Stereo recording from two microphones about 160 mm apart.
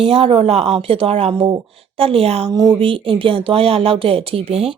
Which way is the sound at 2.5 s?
25° right (ahead or behind).